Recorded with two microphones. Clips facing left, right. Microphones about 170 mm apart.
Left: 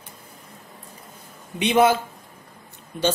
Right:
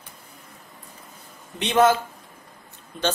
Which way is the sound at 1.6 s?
10° left (ahead or behind).